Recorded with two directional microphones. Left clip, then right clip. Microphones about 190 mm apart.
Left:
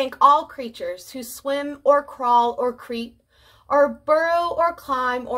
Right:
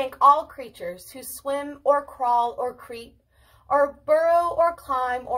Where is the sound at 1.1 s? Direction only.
30° left (ahead or behind).